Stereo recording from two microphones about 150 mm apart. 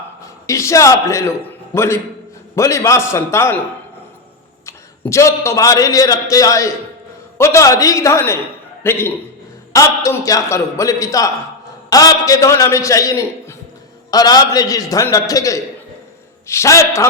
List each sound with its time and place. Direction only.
0.4 s a man's voice: 20° left (ahead or behind)
4.6 s a man's voice: 20° left (ahead or behind)